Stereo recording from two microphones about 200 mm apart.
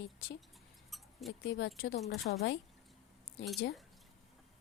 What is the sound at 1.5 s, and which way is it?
Speech, 55° left (ahead or behind).